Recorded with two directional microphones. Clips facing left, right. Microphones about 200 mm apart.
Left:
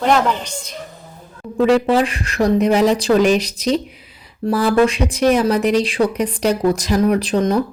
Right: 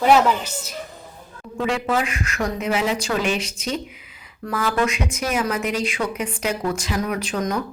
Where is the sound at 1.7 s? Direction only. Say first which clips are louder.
Left 8 dB; 35° left (ahead or behind).